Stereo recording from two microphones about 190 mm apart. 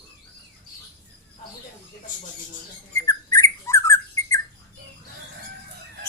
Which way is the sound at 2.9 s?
15° left (ahead or behind).